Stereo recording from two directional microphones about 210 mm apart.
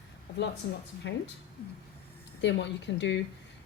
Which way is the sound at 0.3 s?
55° left (ahead or behind).